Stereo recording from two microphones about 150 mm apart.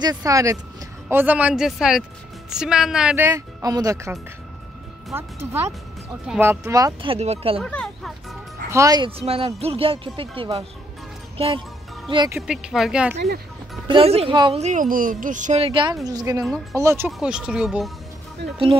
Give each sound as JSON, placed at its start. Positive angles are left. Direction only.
{"t": 0.0, "sound": "speech", "side_deg": -25}
{"t": 3.3, "sound": "speech", "side_deg": -20}
{"t": 7.0, "sound": "speech", "side_deg": -40}
{"t": 7.6, "sound": "a sound", "side_deg": 5}
{"t": 8.6, "sound": "speech", "side_deg": -20}
{"t": 9.2, "sound": "speech", "side_deg": -40}
{"t": 12.4, "sound": "speech", "side_deg": -5}
{"t": 13.1, "sound": "speech", "side_deg": -90}
{"t": 13.8, "sound": "speech", "side_deg": -40}
{"t": 14.3, "sound": "speech", "side_deg": -30}
{"t": 14.6, "sound": "speech", "side_deg": -55}
{"t": 15.6, "sound": "speech", "side_deg": -35}
{"t": 16.1, "sound": "speech", "side_deg": -25}
{"t": 17.2, "sound": "speech", "side_deg": -5}